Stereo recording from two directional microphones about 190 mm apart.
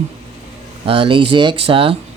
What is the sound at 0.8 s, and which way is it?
Speech, 25° right (ahead or behind).